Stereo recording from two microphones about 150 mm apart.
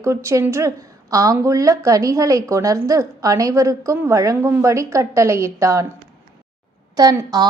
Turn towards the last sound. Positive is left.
turn(degrees=-20)  # may be behind; listen again after turning